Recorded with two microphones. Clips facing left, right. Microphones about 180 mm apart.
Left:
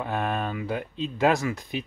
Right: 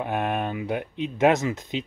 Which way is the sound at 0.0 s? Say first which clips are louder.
Right 2 dB; 20° right (ahead or behind).